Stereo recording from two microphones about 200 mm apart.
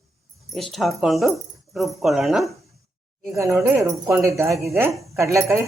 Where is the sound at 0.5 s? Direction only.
Centre (ahead or behind).